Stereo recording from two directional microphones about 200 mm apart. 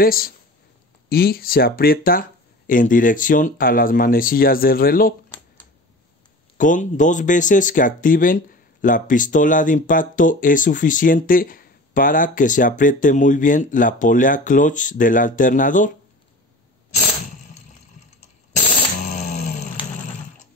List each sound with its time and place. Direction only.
0.0 s speech: 45° left (ahead or behind)
6.6 s speech: 40° left (ahead or behind)
19.0 s music: 35° left (ahead or behind)